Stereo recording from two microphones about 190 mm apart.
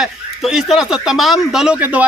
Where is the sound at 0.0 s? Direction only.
Centre (ahead or behind).